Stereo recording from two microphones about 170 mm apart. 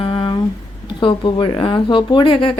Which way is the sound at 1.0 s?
25° left (ahead or behind).